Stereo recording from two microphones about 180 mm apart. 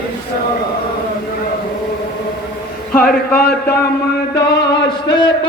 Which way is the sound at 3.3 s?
60° left (ahead or behind).